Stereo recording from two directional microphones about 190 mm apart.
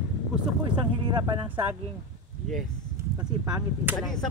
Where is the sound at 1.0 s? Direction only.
25° right (ahead or behind).